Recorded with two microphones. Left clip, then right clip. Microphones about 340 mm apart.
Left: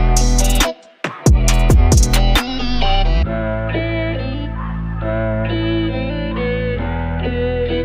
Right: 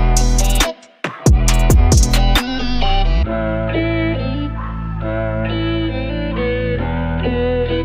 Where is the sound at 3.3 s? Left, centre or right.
Left.